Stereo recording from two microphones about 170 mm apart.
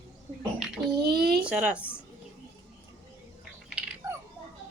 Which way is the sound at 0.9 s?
65° right (ahead or behind).